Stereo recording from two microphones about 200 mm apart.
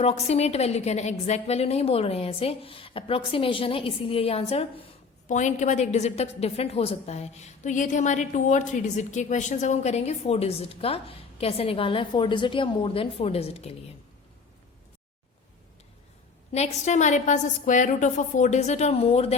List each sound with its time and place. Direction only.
0.0 s a woman's voice: 30° left (ahead or behind)
16.5 s a woman's voice: 30° left (ahead or behind)